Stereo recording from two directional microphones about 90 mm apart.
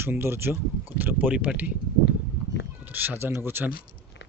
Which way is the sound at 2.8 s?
20° right (ahead or behind).